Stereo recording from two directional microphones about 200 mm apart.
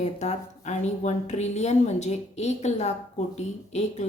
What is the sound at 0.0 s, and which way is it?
A woman's voice, 35° left (ahead or behind).